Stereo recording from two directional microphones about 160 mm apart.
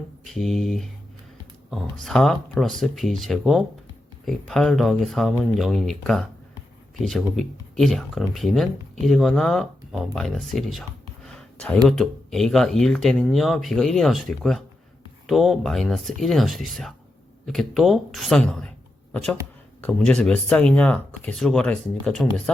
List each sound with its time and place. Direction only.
0.3 s speech: centre (ahead or behind)